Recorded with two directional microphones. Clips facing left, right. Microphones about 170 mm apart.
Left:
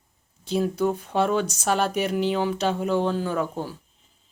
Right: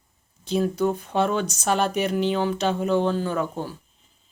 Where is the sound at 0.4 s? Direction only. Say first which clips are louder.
Right 1 dB; 5° left (ahead or behind).